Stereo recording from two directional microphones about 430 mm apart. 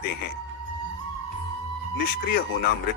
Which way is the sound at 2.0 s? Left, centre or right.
Left.